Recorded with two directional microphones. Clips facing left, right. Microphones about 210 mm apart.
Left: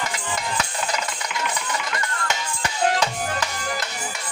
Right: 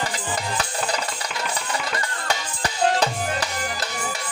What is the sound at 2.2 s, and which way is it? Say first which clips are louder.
Music: right 1 dB; 35° right (ahead or behind).